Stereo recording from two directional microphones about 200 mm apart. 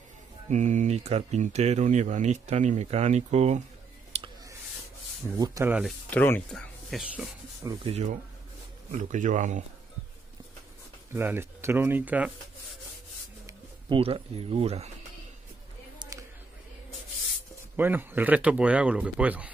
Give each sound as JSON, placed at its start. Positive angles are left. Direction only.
{"t": 0.5, "sound": "speech", "side_deg": -35}
{"t": 4.1, "sound": "clicking", "side_deg": -30}
{"t": 5.4, "sound": "speech", "side_deg": -15}
{"t": 6.0, "sound": "speech", "side_deg": 10}
{"t": 6.9, "sound": "speech", "side_deg": -5}
{"t": 7.8, "sound": "speech", "side_deg": -30}
{"t": 11.1, "sound": "speech", "side_deg": -10}
{"t": 13.5, "sound": "speech", "side_deg": -25}
{"t": 16.0, "sound": "a sound", "side_deg": -15}
{"t": 17.7, "sound": "speech", "side_deg": -10}